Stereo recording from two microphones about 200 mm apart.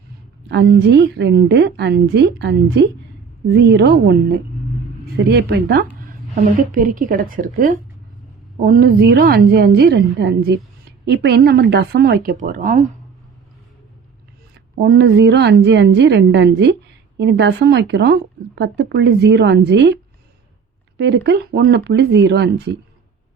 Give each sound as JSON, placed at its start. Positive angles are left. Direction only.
{"t": 0.4, "sound": "a woman's voice", "side_deg": -55}
{"t": 14.8, "sound": "speech", "side_deg": -55}
{"t": 21.0, "sound": "speech", "side_deg": -60}